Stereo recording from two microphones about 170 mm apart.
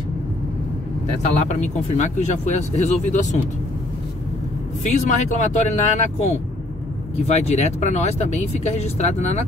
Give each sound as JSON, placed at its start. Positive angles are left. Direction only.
{"t": 1.2, "sound": "speech", "side_deg": 45}
{"t": 4.8, "sound": "speech", "side_deg": 45}